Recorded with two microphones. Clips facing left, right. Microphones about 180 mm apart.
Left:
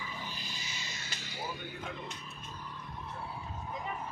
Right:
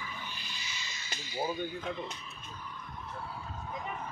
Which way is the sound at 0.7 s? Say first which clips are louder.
Left 1 dB; 55° left (ahead or behind).